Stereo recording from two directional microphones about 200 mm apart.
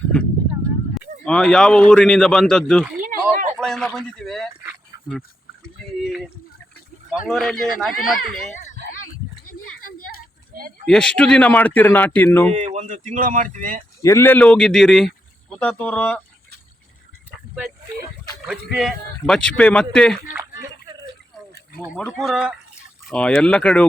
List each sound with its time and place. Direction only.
1.2 s speech: 5° left (ahead or behind)
3.0 s a sound: 40° right (ahead or behind)
3.6 s speech: 5° left (ahead or behind)
6.0 s speech: centre (ahead or behind)
10.5 s a sound: 45° right (ahead or behind)
10.8 s speech: 5° left (ahead or behind)
12.5 s speech: 35° right (ahead or behind)
14.0 s speech: 15° left (ahead or behind)
18.4 s speech: 5° right (ahead or behind)
20.2 s a sound: 10° right (ahead or behind)
21.9 s speech: centre (ahead or behind)